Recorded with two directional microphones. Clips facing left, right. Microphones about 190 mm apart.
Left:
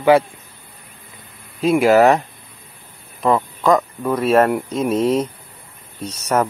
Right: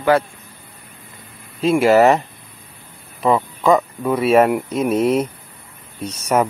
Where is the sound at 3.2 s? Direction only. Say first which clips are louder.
Right 1 dB; centre (ahead or behind).